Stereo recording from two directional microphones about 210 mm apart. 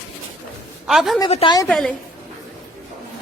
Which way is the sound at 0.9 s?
Centre (ahead or behind).